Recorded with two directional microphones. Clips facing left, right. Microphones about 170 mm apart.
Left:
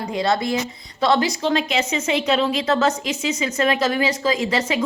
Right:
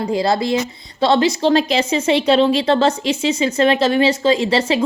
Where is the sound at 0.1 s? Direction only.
30° right (ahead or behind).